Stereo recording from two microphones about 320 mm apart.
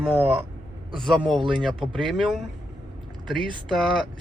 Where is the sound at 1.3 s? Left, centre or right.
Centre.